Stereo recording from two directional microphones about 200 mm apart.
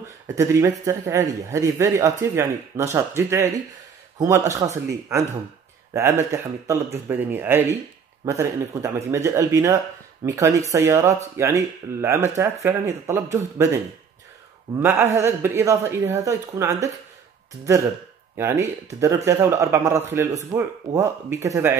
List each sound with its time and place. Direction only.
0.4 s speech: 15° right (ahead or behind)
14.8 s speech: 10° right (ahead or behind)
18.3 s speech: 15° right (ahead or behind)